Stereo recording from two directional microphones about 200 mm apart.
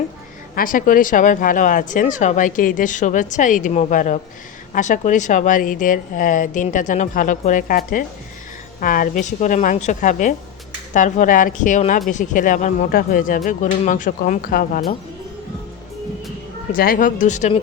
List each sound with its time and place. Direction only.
0.5 s speech: 45° left (ahead or behind)
16.7 s speech: 45° left (ahead or behind)